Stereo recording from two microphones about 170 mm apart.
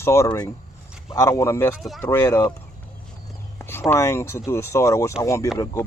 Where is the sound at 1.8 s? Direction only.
Centre (ahead or behind).